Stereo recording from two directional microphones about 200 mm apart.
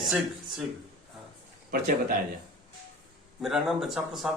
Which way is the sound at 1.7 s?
45° right (ahead or behind).